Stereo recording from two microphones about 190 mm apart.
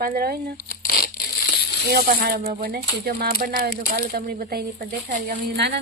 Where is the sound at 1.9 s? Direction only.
55° right (ahead or behind).